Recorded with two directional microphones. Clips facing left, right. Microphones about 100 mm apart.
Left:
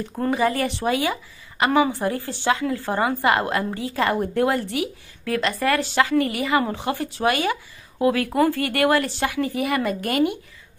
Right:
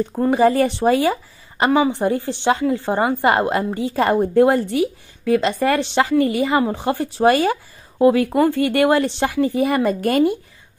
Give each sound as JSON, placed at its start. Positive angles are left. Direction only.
{"t": 0.3, "sound": "speech", "side_deg": -30}
{"t": 1.7, "sound": "speech", "side_deg": -20}